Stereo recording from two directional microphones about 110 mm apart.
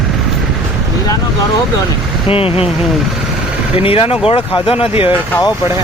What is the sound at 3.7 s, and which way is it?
Speech, 60° left (ahead or behind).